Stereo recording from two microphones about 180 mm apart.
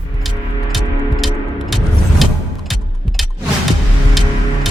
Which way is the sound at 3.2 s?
Centre (ahead or behind).